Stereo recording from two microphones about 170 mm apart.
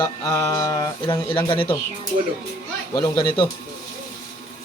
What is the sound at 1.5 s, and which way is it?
Speech, 30° left (ahead or behind).